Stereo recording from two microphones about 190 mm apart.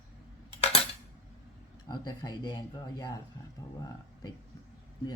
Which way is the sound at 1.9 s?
20° left (ahead or behind).